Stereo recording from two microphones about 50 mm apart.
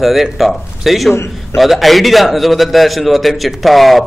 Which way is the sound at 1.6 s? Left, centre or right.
Centre.